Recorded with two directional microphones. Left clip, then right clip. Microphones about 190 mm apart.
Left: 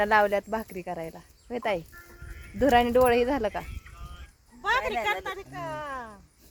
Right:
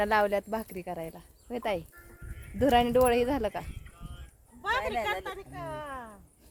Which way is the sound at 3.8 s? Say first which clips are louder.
Left 4 dB; 25° left (ahead or behind).